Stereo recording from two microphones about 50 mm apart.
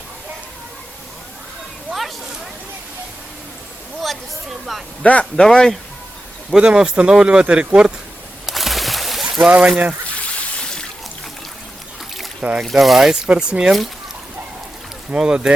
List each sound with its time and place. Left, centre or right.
1.9 s a sound: centre
5.4 s speech: centre
6.6 s speech: centre
8.4 s a sound: centre
9.4 s speech: right
10.2 s a sound: left
12.4 s speech: centre
12.7 s speech: centre
15.1 s speech: centre